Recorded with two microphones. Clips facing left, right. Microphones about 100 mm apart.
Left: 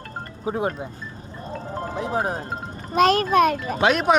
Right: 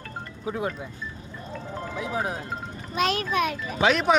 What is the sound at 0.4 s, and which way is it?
Speech, 30° left (ahead or behind).